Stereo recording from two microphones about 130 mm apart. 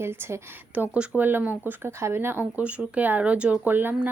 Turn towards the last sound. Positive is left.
turn(degrees=-15)  # may be behind; listen again after turning